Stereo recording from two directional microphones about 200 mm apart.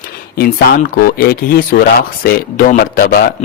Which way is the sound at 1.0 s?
50° left (ahead or behind).